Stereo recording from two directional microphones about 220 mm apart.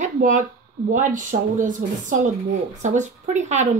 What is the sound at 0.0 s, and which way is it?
A woman's voice, 35° right (ahead or behind).